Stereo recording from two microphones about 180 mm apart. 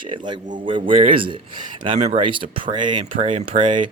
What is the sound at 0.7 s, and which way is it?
Speech, 30° right (ahead or behind).